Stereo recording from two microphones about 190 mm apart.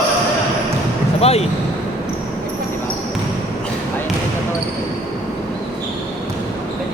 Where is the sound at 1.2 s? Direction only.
30° left (ahead or behind).